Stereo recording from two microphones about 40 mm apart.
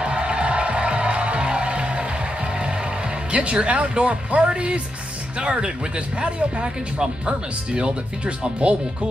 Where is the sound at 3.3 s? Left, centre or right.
Right.